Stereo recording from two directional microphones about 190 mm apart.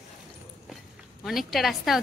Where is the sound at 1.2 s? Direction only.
Centre (ahead or behind).